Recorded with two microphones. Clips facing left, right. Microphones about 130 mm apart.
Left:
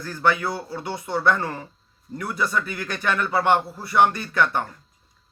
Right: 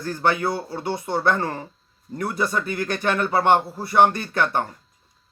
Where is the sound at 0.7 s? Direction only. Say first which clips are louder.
Right 2 dB; 25° right (ahead or behind).